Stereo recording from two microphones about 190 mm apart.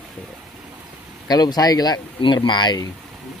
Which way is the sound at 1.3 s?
20° left (ahead or behind).